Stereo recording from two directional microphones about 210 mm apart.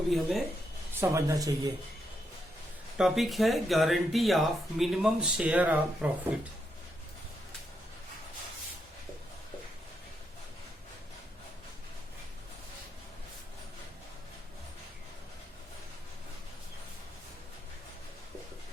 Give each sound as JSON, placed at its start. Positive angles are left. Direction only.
{"t": 0.1, "sound": "speech", "side_deg": 0}
{"t": 0.9, "sound": "speech", "side_deg": -15}
{"t": 3.0, "sound": "speech", "side_deg": 0}